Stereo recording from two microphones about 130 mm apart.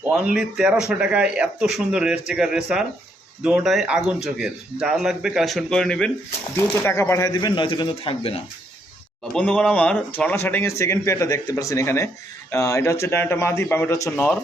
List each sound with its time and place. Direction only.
0.0 s speech: 10° right (ahead or behind); by 6.1 s 5° left (ahead or behind)
6.6 s speech: 20° left (ahead or behind); by 8.4 s 45° left (ahead or behind)
9.3 s speech: 5° left (ahead or behind)